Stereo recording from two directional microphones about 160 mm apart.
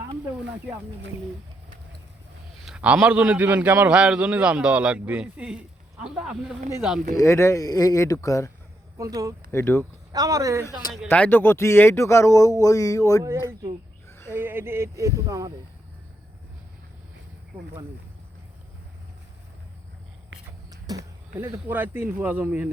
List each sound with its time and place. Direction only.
2.6 s a man's voice: 10° right (ahead or behind)
7.2 s speech: 15° left (ahead or behind)
9.0 s speech: 20° right (ahead or behind)
9.5 s speech: 15° left (ahead or behind)
10.1 s speech: 20° right (ahead or behind)
11.1 s speech: 10° left (ahead or behind)
13.5 s speech: 25° right (ahead or behind)
14.1 s a sound: 15° left (ahead or behind)
14.3 s a man's voice: 15° right (ahead or behind)
20.7 s a sound: 20° right (ahead or behind)
21.3 s a man's voice: 15° right (ahead or behind)